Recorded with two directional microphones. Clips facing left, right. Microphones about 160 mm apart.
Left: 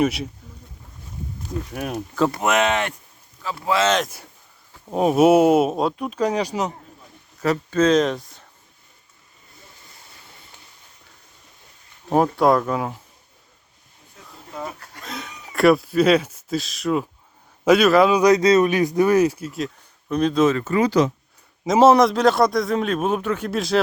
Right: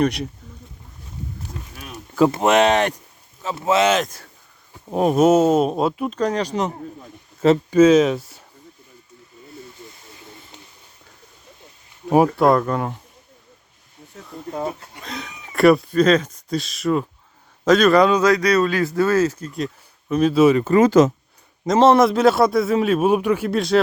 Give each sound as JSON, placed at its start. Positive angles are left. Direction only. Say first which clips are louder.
{"t": 0.0, "sound": "a man's voice", "louder": "right 1 dB", "side_deg": 0}
{"t": 1.7, "sound": "speech", "louder": "left 10 dB", "side_deg": 65}
{"t": 2.3, "sound": "speech", "louder": "right 4 dB", "side_deg": -30}
{"t": 3.4, "sound": "speech", "louder": "right 3 dB", "side_deg": -20}
{"t": 3.8, "sound": "a man's voice", "louder": "right 2 dB", "side_deg": -5}
{"t": 6.1, "sound": "speech", "louder": "left 2 dB", "side_deg": 10}
{"t": 7.7, "sound": "speech", "louder": "right 3 dB", "side_deg": -10}
{"t": 12.1, "sound": "a man's voice", "louder": "right 2 dB", "side_deg": -5}
{"t": 14.5, "sound": "speech", "louder": "right 6 dB", "side_deg": -30}
{"t": 15.0, "sound": "speech", "louder": "right 1 dB", "side_deg": 0}
{"t": 18.2, "sound": "speech", "louder": "left 2 dB", "side_deg": 20}
{"t": 20.7, "sound": "speech", "louder": "right 5 dB", "side_deg": -45}
{"t": 21.6, "sound": "a man's voice", "louder": "even", "side_deg": 5}
{"t": 23.5, "sound": "a man's voice", "louder": "right 2 dB", "side_deg": 0}